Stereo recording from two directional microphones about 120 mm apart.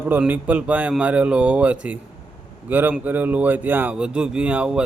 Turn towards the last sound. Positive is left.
turn(degrees=-10)  # may be behind; listen again after turning